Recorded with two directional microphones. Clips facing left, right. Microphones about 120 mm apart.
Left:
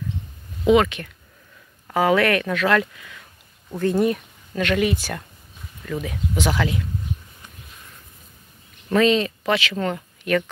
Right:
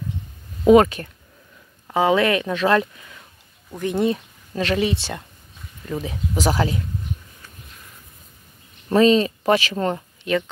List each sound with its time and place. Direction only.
0.7 s speech: 40° right (ahead or behind)
1.9 s speech: 20° right (ahead or behind); by 6.8 s 35° right (ahead or behind)
8.8 s speech: 35° right (ahead or behind)